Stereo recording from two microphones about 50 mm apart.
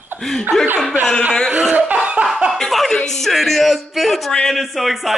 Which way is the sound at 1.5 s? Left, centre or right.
Right.